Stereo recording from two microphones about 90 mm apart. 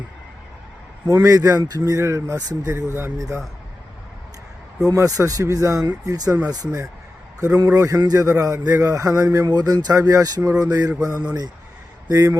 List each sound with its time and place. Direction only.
1.0 s a man's voice: 40° right (ahead or behind)
1.8 s a man's voice: 30° right (ahead or behind)
4.9 s a man's voice: 40° right (ahead or behind)
6.1 s a sound: 45° right (ahead or behind)
7.4 s a man's voice: 40° right (ahead or behind)
10.1 s a sound: 45° right (ahead or behind)
12.0 s a man's voice: 40° right (ahead or behind)